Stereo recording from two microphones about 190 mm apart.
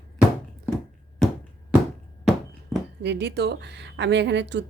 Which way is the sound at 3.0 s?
65° right (ahead or behind).